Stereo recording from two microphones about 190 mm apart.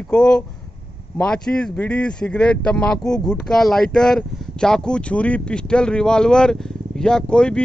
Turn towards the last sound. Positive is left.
turn(degrees=5)  # may be behind; listen again after turning